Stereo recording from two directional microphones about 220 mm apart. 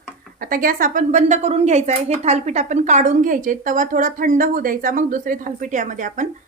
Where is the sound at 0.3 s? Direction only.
40° right (ahead or behind).